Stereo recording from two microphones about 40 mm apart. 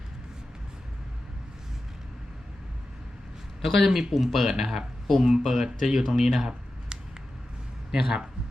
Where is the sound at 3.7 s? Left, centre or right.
Centre.